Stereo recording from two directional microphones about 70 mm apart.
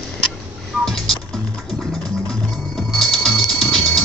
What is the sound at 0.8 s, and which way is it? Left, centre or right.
Music, centre.